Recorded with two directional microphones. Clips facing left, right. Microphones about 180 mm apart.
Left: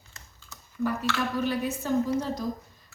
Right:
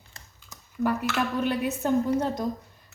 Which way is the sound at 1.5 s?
60° right (ahead or behind).